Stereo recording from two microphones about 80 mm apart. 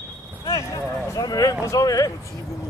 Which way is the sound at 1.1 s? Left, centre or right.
Left.